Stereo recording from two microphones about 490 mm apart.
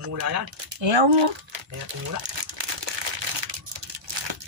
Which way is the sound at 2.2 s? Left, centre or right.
Right.